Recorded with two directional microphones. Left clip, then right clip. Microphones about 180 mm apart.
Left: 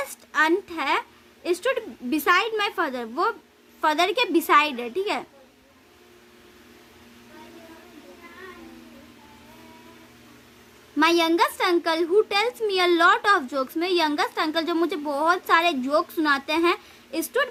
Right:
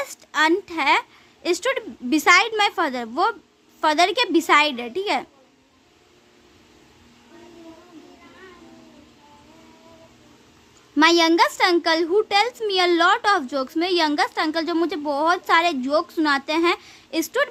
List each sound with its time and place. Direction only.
0.3 s a woman's voice: 25° right (ahead or behind)
10.9 s a woman's voice: 25° right (ahead or behind)